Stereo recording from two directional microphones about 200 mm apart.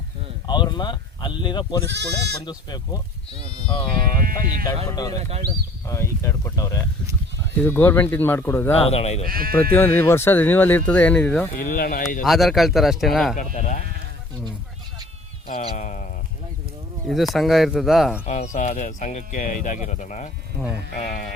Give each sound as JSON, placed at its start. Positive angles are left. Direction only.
{"t": 0.4, "sound": "speech", "side_deg": 20}
{"t": 1.9, "sound": "speech", "side_deg": -60}
{"t": 2.4, "sound": "speech", "side_deg": 20}
{"t": 4.2, "sound": "speech", "side_deg": -45}
{"t": 4.9, "sound": "speech", "side_deg": 20}
{"t": 8.8, "sound": "speech", "side_deg": 30}
{"t": 9.2, "sound": "speech", "side_deg": -45}
{"t": 9.7, "sound": "speech", "side_deg": 10}
{"t": 11.5, "sound": "speech", "side_deg": 45}
{"t": 12.2, "sound": "speech", "side_deg": 0}
{"t": 13.3, "sound": "speech", "side_deg": 40}
{"t": 15.4, "sound": "speech", "side_deg": 40}
{"t": 17.1, "sound": "speech", "side_deg": 0}
{"t": 18.3, "sound": "speech", "side_deg": 35}